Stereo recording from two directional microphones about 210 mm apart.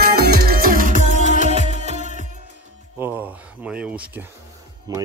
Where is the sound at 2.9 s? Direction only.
10° right (ahead or behind).